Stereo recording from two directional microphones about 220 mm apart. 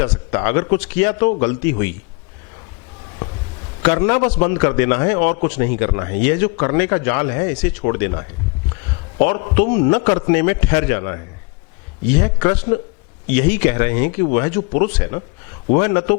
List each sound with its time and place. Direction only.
0.0 s a man's voice: 15° left (ahead or behind)
3.8 s a man's voice: 15° left (ahead or behind)